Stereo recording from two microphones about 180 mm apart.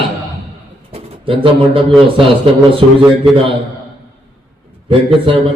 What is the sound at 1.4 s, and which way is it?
Speech, 30° right (ahead or behind).